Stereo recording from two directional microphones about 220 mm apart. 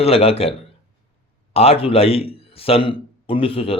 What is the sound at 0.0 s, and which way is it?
Speech, 25° left (ahead or behind).